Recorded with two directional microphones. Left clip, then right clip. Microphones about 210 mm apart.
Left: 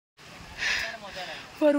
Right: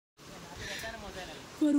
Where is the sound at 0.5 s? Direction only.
Centre (ahead or behind).